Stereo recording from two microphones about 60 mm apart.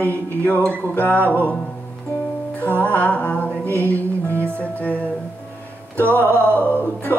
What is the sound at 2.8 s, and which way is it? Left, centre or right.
Music, left.